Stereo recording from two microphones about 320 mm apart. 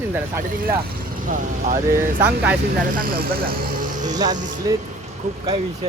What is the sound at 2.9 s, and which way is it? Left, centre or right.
Speech, right.